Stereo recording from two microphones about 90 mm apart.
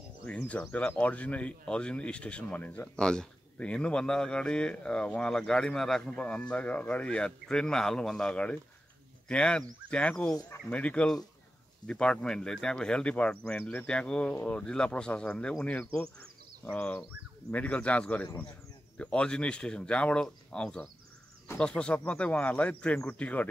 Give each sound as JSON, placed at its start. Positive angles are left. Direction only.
{"t": 0.3, "sound": "speech", "side_deg": 15}